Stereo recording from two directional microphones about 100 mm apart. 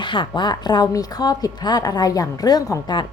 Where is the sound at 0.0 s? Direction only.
50° left (ahead or behind).